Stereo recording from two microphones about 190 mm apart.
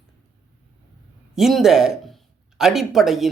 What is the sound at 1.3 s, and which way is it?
Speech, centre (ahead or behind).